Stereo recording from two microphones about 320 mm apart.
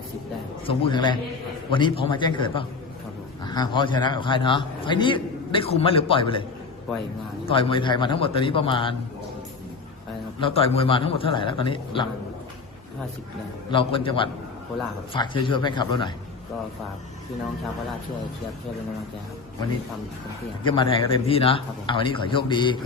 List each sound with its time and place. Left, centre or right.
0.6 s a man's voice: centre
7.4 s a man's voice: centre
10.4 s a man's voice: centre
13.7 s a man's voice: centre
20.7 s a man's voice: centre